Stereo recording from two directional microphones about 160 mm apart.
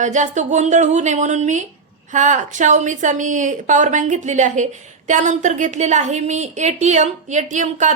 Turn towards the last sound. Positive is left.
turn(degrees=-50)  # may be behind; listen again after turning